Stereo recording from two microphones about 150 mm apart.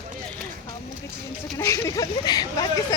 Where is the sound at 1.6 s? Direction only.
20° left (ahead or behind).